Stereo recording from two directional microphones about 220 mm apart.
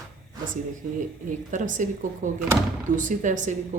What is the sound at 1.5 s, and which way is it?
A woman's voice, 35° right (ahead or behind).